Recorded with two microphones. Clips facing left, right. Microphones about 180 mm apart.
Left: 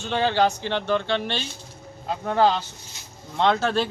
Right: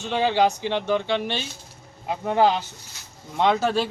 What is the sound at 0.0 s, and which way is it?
Speech, 10° right (ahead or behind).